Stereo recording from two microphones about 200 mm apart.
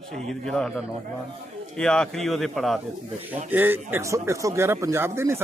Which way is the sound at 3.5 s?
10° right (ahead or behind).